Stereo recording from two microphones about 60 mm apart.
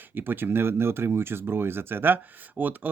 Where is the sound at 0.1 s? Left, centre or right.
Right.